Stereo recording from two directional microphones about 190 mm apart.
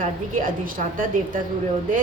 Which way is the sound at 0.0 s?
45° right (ahead or behind).